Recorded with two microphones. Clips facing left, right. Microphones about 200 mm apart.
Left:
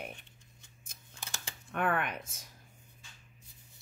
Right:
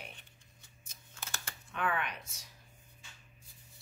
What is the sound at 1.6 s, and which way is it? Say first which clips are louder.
Speech: left 4 dB; 55° left (ahead or behind).